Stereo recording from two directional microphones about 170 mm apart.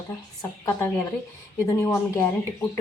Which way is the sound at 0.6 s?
10° left (ahead or behind).